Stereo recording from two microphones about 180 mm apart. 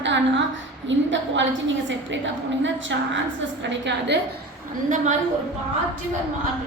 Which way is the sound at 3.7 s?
75° right (ahead or behind).